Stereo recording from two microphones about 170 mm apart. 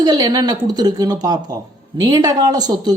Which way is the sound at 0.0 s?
25° right (ahead or behind).